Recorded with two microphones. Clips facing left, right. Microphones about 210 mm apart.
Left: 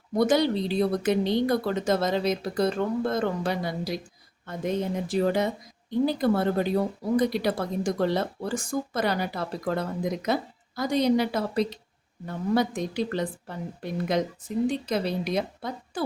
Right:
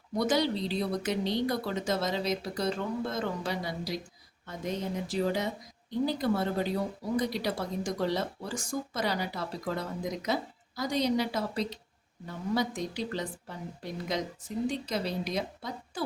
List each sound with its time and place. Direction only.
0.2 s a woman's voice: 55° left (ahead or behind)